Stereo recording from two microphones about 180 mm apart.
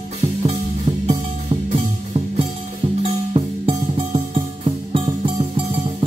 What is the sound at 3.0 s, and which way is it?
Music, 30° right (ahead or behind).